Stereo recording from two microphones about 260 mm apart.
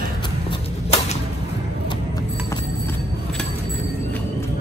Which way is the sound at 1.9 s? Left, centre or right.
Centre.